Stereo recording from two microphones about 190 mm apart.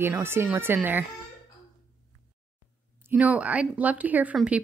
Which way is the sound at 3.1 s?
10° right (ahead or behind).